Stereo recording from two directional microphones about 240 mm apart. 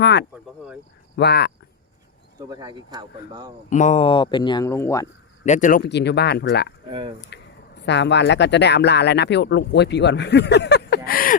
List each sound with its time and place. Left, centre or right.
0.0 s speech: left
2.5 s speech: centre
3.7 s speech: left; by 5.0 s centre
5.5 s speech: left
5.9 s speech: left
7.3 s a sound: left
7.8 s speech: left